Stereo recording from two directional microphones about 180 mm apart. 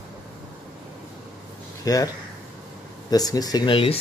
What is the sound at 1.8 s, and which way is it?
Speech, 20° left (ahead or behind).